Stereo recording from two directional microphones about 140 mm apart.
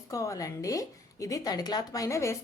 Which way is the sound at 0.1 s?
25° left (ahead or behind).